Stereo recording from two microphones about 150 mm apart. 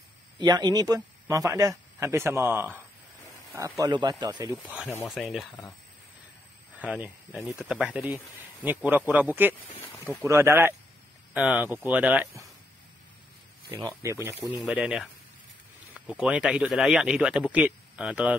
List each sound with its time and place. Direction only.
0.4 s a man's voice: 30° right (ahead or behind)
4.6 s speech: 5° right (ahead or behind)
6.8 s speech: 10° right (ahead or behind)
13.7 s a man's voice: 30° right (ahead or behind)
14.4 s speech: centre (ahead or behind)